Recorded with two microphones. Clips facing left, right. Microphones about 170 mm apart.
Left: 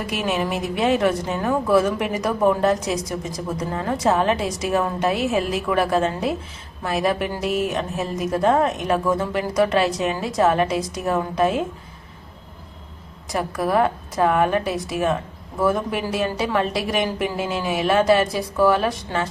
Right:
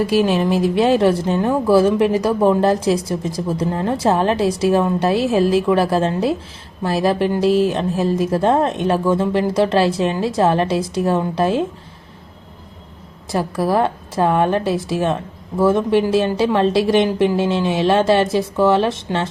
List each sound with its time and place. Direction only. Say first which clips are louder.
0.1 s a woman's voice: right 7 dB; 30° right (ahead or behind)
13.3 s a woman's voice: right 3 dB; 30° right (ahead or behind)